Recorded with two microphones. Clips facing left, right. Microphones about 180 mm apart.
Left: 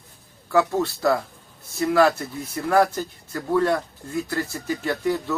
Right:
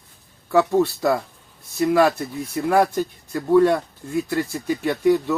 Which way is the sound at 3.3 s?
15° right (ahead or behind).